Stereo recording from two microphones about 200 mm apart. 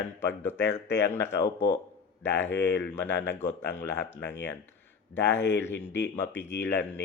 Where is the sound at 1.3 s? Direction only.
60° left (ahead or behind).